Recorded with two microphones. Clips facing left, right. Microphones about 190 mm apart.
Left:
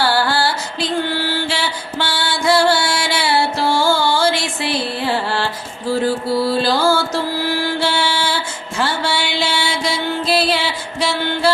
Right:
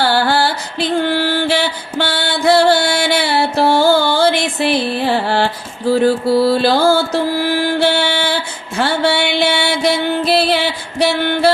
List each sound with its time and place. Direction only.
0.0 s mantra: 60° right (ahead or behind)
4.4 s a sound: 60° right (ahead or behind)
4.9 s music: 55° right (ahead or behind)
6.9 s mantra: 60° right (ahead or behind)
8.8 s music: 60° right (ahead or behind)